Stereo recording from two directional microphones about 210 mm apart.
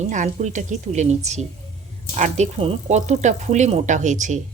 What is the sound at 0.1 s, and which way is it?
Speech, 35° right (ahead or behind).